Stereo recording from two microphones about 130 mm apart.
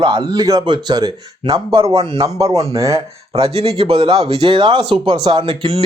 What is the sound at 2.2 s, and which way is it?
Speech, 25° right (ahead or behind).